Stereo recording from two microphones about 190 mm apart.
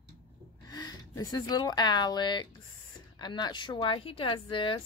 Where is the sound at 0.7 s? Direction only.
20° left (ahead or behind).